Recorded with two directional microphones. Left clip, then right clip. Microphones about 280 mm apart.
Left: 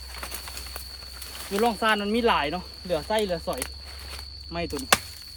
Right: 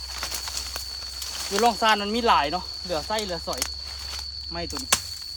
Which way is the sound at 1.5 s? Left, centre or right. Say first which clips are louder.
Right 3 dB; right.